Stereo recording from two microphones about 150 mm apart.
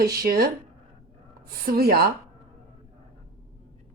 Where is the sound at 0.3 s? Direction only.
85° right.